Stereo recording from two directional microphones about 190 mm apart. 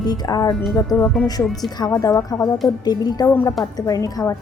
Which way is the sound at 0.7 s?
10° left (ahead or behind).